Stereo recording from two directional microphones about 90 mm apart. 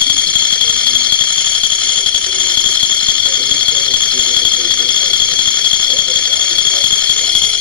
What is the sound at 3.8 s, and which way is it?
Alarm, 15° left (ahead or behind).